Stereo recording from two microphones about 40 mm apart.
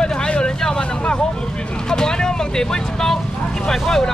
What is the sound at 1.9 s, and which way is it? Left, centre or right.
Speech, centre.